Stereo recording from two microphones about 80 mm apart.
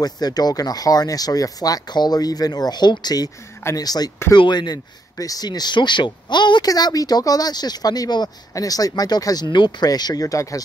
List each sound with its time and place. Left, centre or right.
0.0 s speech: left
4.3 s speech: left
5.1 s speech: left
6.7 s speech: left